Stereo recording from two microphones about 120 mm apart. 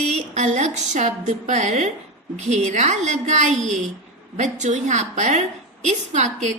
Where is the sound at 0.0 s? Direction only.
70° right (ahead or behind).